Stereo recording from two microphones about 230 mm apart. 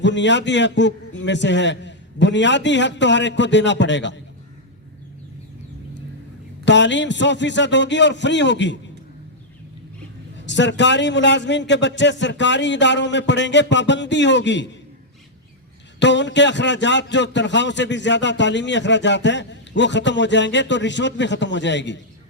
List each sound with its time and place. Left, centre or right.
0.0 s a man's voice: left
6.7 s a man's voice: left
10.4 s a man's voice: left
16.0 s a man's voice: left